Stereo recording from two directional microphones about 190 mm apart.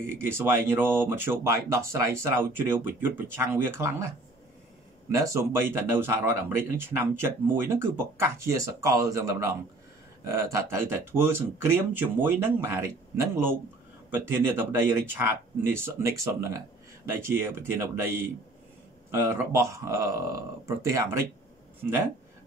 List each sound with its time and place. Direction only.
0.0 s speech: 15° right (ahead or behind)
5.1 s speech: 15° right (ahead or behind)